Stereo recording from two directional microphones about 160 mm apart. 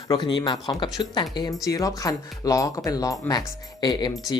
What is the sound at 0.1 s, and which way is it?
Speech, 30° left (ahead or behind).